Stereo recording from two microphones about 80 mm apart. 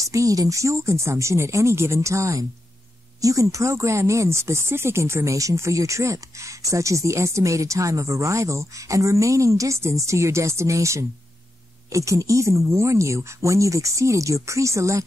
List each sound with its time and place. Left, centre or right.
0.0 s speech: right